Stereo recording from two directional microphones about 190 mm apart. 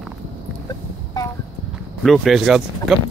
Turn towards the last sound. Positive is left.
turn(degrees=0)  # may be behind; listen again after turning